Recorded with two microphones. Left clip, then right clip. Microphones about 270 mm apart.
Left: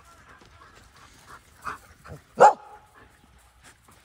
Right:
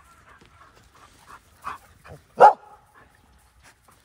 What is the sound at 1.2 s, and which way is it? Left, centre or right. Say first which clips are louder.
Dog: right 1 dB; right.